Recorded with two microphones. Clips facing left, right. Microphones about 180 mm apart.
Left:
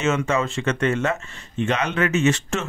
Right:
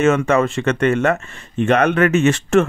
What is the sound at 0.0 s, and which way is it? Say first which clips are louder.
Speech: right 7 dB; 55° right (ahead or behind).